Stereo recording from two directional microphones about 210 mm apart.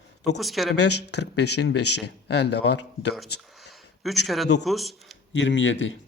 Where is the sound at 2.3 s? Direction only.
55° left (ahead or behind).